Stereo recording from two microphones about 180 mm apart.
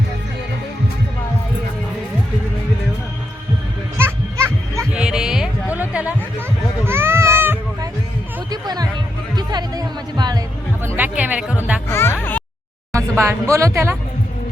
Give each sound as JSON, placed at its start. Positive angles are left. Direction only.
{"t": 3.9, "sound": "music", "side_deg": -15}
{"t": 4.9, "sound": "a sound", "side_deg": -5}
{"t": 8.4, "sound": "music", "side_deg": -20}
{"t": 10.8, "sound": "music", "side_deg": -10}
{"t": 11.9, "sound": "music", "side_deg": 15}
{"t": 12.9, "sound": "a sound", "side_deg": -15}